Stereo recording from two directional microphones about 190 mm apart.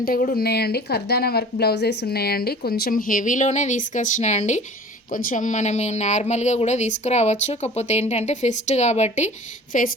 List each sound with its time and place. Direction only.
0.0 s speech: 45° left (ahead or behind)